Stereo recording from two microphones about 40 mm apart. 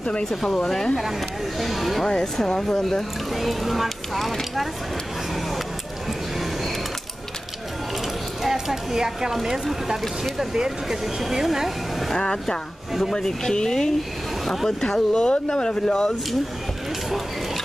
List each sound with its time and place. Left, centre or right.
0.2 s speech: centre
1.6 s speech: centre
2.0 s speech: centre
6.3 s music: centre
8.4 s speech: centre
12.2 s speech: centre
14.4 s speech: centre
14.8 s speech: left